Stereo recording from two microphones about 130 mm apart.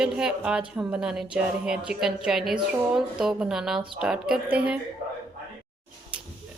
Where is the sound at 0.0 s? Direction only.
5° right (ahead or behind).